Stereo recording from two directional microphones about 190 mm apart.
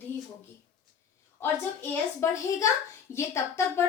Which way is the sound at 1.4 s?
15° left (ahead or behind).